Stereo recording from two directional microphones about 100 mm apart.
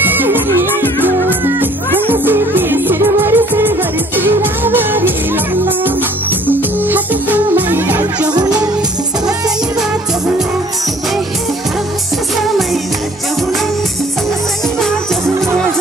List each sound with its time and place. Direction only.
0.0 s music: 20° right (ahead or behind)
6.4 s music: 20° right (ahead or behind)